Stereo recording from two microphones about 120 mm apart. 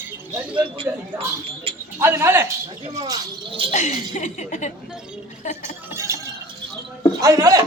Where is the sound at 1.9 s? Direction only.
20° right (ahead or behind).